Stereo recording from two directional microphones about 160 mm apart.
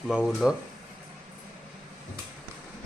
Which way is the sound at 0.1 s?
Centre (ahead or behind).